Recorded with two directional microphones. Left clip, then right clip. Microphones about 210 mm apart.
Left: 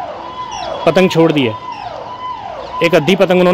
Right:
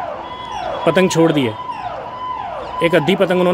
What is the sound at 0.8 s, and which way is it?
Speech, 20° left (ahead or behind).